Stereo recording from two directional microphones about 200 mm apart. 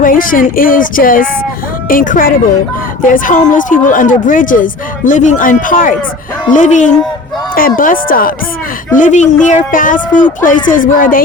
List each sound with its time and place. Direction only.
0.0 s speech: 45° left (ahead or behind)